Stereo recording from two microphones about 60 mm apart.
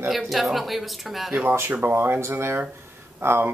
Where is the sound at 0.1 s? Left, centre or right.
Centre.